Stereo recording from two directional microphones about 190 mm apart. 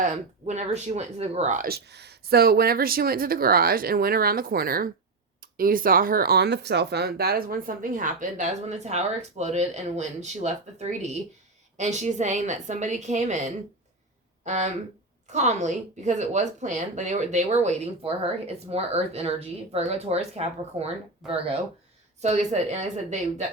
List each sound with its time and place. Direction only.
0.0 s speech: 40° right (ahead or behind)